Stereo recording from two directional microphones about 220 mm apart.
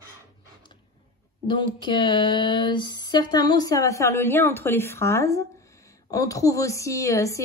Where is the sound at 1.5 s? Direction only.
20° left (ahead or behind).